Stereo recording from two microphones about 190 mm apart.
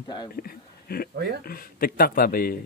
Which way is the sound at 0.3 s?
50° left (ahead or behind).